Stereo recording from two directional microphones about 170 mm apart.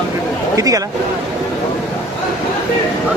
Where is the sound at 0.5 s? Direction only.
20° right (ahead or behind).